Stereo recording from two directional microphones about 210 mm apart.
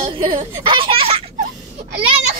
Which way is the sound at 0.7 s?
25° right (ahead or behind).